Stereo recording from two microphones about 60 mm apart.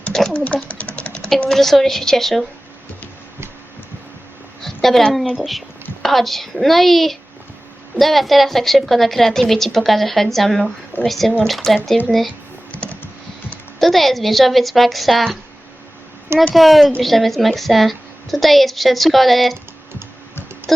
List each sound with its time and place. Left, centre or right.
0.1 s a sound: centre
0.3 s speech: left
0.9 s typing: left
1.5 s a woman's voice: centre
4.6 s a sound: centre
6.0 s a woman's voice: centre
12.7 s computer keyboard: left
13.7 s a woman's voice: centre
16.6 s a woman's voice: centre
20.7 s a sound: centre